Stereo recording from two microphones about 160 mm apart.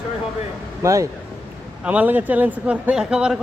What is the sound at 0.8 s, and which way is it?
A man's voice, 20° right (ahead or behind).